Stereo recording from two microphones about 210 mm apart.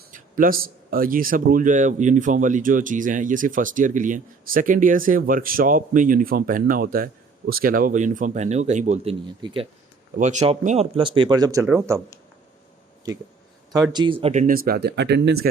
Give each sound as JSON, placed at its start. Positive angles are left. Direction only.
{"t": 0.1, "sound": "a man's voice", "side_deg": -40}
{"t": 9.2, "sound": "speech", "side_deg": -25}
{"t": 10.2, "sound": "speech", "side_deg": -35}
{"t": 13.9, "sound": "speech", "side_deg": -25}
{"t": 14.4, "sound": "speech", "side_deg": -45}